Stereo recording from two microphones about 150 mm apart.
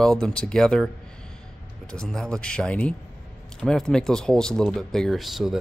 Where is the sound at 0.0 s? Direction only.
5° left (ahead or behind).